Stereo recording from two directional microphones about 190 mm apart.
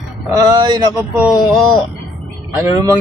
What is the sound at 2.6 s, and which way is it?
Speech, 15° right (ahead or behind).